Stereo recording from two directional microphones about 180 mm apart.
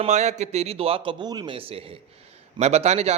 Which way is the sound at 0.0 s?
40° right (ahead or behind).